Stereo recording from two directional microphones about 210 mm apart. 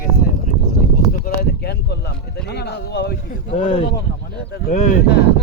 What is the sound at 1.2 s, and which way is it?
Speech, 50° left (ahead or behind).